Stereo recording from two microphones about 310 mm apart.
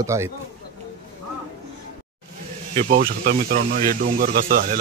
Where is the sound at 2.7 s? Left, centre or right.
Right.